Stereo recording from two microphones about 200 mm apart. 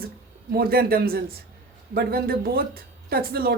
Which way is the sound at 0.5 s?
50° right (ahead or behind).